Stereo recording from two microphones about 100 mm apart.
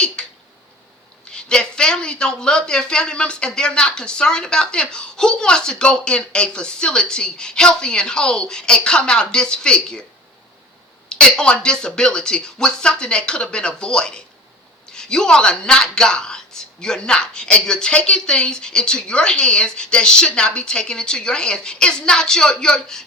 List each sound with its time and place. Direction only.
0.2 s a sound: 5° left (ahead or behind)
1.3 s speech: 10° left (ahead or behind)
11.1 s speech: 10° left (ahead or behind)